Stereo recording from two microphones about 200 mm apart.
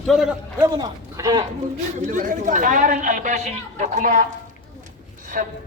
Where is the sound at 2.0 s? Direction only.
40° right (ahead or behind).